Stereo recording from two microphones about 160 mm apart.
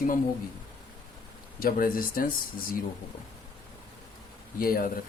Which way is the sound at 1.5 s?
60° left (ahead or behind).